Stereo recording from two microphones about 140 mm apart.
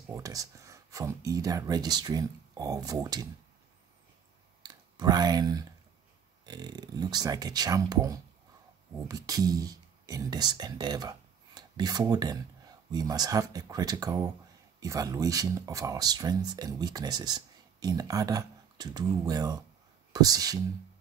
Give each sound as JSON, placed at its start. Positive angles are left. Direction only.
{"t": 0.1, "sound": "speech", "side_deg": -25}
{"t": 4.6, "sound": "speech", "side_deg": -30}